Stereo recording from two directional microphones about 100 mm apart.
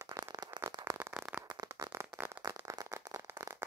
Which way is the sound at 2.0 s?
25° right (ahead or behind).